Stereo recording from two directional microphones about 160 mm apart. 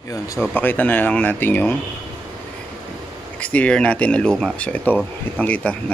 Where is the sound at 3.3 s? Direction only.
10° left (ahead or behind).